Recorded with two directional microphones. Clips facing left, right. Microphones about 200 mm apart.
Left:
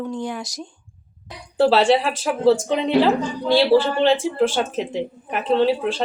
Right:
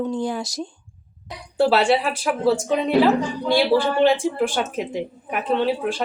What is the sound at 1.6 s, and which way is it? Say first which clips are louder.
Speech: left 2 dB; 10° right (ahead or behind).